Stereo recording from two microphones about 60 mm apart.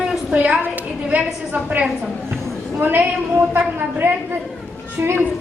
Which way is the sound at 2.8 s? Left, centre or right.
Right.